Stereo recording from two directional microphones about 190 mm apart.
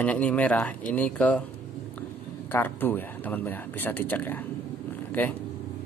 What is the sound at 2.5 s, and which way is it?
Speech, 10° left (ahead or behind).